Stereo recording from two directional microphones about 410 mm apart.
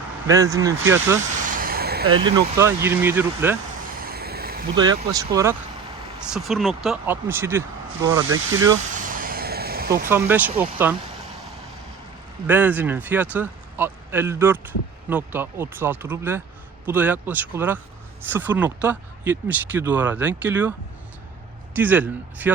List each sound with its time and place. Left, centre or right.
0.3 s speech: centre
1.5 s vehicle: right
2.6 s speech: centre
4.0 s a sound: right
4.8 s speech: centre
9.0 s vehicle: centre
10.1 s speech: centre
12.5 s speech: centre